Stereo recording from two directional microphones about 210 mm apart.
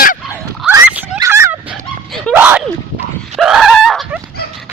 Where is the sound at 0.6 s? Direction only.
10° right (ahead or behind).